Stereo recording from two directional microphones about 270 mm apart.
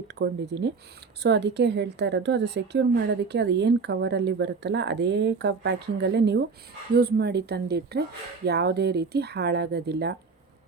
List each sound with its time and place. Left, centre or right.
0.1 s a woman's voice: right